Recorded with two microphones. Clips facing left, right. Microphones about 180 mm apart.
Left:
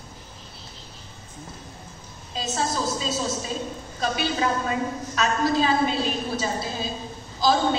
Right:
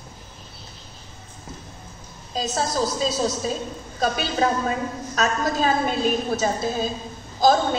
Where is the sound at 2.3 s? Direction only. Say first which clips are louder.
Right 3 dB; 40° right (ahead or behind).